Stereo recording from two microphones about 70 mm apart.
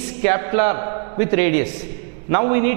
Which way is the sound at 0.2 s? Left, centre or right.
Centre.